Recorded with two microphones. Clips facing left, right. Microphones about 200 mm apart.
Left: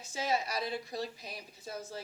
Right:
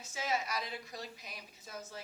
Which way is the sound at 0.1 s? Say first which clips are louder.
Left 3 dB; 35° left (ahead or behind).